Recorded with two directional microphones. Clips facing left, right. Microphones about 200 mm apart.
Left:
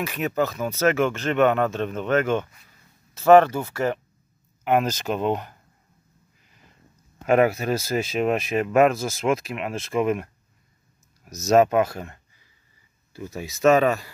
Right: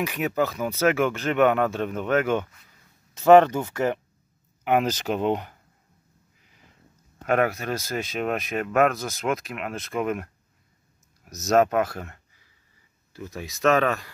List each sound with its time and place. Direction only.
0.0 s speech: 10° right (ahead or behind)
7.2 s speech: 5° left (ahead or behind)
13.1 s speech: 5° left (ahead or behind)